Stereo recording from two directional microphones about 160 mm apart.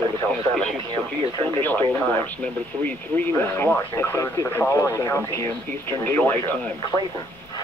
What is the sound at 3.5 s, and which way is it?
Speech, 10° left (ahead or behind).